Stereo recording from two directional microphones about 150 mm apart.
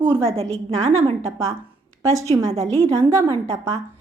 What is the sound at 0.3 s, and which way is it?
Speech, 45° right (ahead or behind).